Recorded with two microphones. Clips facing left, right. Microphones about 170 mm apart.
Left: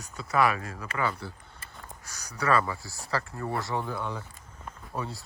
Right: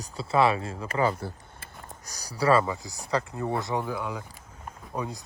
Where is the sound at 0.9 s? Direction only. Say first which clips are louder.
Right 5 dB; 40° right (ahead or behind).